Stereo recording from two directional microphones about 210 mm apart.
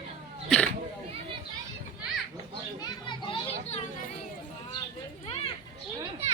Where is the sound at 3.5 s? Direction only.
30° left (ahead or behind).